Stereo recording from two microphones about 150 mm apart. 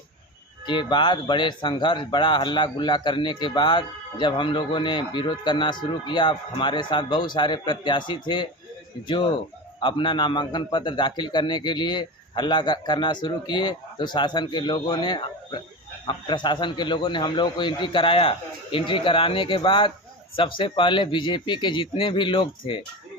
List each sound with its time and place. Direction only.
0.6 s speech: 30° left (ahead or behind)